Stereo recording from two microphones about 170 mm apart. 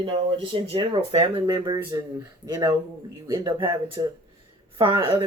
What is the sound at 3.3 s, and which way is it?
Speech, 25° right (ahead or behind).